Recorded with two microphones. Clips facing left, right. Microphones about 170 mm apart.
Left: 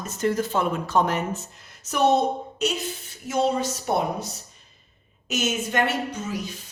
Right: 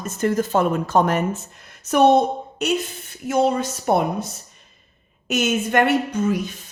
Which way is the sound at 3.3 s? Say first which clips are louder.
Right 4 dB; 55° right (ahead or behind).